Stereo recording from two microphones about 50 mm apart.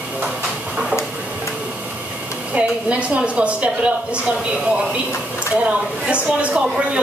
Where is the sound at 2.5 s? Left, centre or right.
Right.